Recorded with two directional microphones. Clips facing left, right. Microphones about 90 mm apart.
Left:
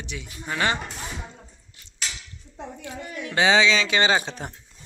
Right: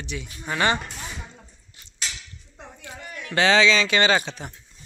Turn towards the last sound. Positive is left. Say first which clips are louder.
# left 1 dB
turn(degrees=40)  # may be behind; listen again after turning